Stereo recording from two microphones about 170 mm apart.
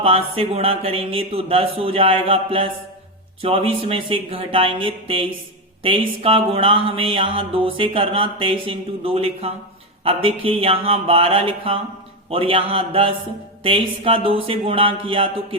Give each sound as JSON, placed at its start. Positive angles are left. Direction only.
{"t": 0.0, "sound": "mantra", "side_deg": -35}